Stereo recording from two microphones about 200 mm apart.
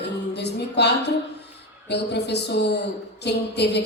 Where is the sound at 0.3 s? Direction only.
55° left (ahead or behind).